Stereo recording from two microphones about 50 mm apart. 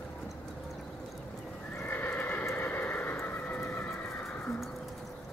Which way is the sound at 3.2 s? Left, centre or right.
Left.